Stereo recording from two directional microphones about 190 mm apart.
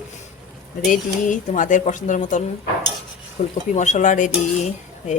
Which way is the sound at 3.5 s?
40° left (ahead or behind).